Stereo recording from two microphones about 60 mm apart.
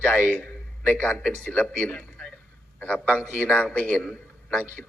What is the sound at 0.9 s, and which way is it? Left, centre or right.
A man's voice, left.